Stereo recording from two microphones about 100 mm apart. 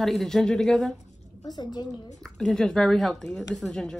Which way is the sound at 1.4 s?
45° left (ahead or behind).